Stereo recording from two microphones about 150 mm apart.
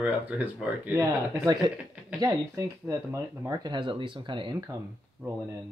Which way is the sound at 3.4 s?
30° right (ahead or behind).